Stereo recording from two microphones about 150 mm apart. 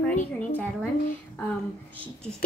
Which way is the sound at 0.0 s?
10° left (ahead or behind).